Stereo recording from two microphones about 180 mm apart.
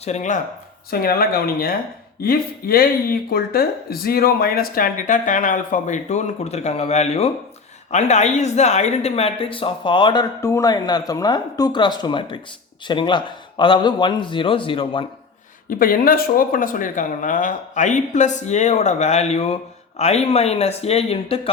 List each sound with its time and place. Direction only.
0.0 s speech: 40° left (ahead or behind)
0.9 s speech: 55° left (ahead or behind); by 15.0 s 30° left (ahead or behind)
15.7 s speech: 50° left (ahead or behind); by 21.5 s 30° left (ahead or behind)